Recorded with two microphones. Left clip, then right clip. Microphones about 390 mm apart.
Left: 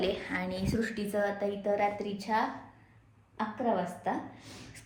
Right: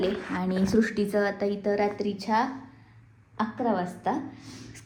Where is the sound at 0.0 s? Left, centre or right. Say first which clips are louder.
Right 3 dB; centre.